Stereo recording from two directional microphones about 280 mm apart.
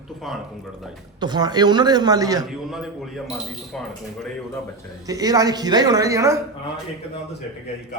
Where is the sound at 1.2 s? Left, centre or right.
Centre.